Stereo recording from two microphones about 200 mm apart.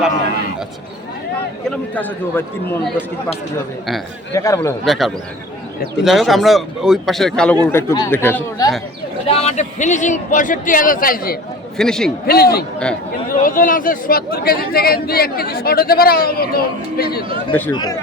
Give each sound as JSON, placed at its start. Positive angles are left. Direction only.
{"t": 1.7, "sound": "speech", "side_deg": 10}
{"t": 4.4, "sound": "speech", "side_deg": 15}
{"t": 4.9, "sound": "a man's voice", "side_deg": 0}
{"t": 9.2, "sound": "a man's voice", "side_deg": 30}
{"t": 11.8, "sound": "a man's voice", "side_deg": 5}
{"t": 12.2, "sound": "speech", "side_deg": 50}
{"t": 17.7, "sound": "speech", "side_deg": 20}